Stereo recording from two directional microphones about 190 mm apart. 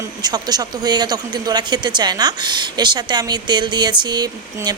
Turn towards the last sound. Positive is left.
turn(degrees=-20)  # may be behind; listen again after turning